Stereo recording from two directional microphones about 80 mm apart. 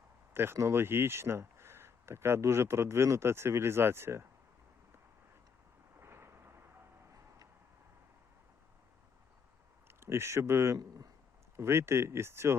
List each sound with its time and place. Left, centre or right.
0.3 s speech: right
6.0 s a sound: right
10.0 s speech: right
10.8 s speech: right
11.5 s speech: right